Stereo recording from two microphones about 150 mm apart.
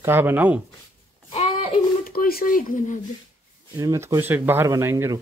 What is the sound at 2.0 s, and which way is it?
Speech, 75° left (ahead or behind).